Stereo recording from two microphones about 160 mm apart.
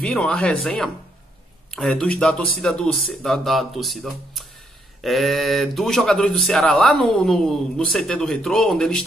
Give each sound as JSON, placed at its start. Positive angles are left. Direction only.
{"t": 0.0, "sound": "speech", "side_deg": 5}
{"t": 1.7, "sound": "speech", "side_deg": 5}